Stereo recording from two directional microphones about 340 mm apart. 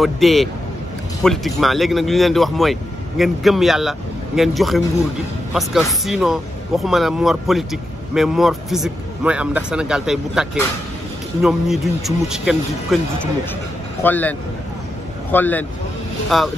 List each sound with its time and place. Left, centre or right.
0.0 s speech: centre
15.3 s speech: centre